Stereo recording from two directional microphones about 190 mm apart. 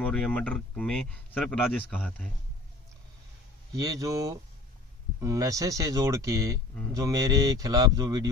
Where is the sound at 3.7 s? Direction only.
20° right (ahead or behind).